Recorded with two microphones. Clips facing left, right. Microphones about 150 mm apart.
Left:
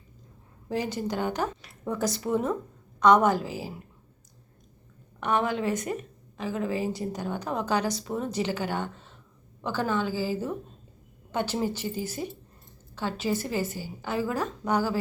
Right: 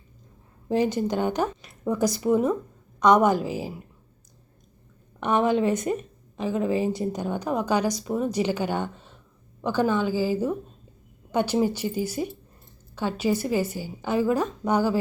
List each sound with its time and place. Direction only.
0.7 s a woman's voice: 20° right (ahead or behind)
5.2 s a woman's voice: 20° right (ahead or behind)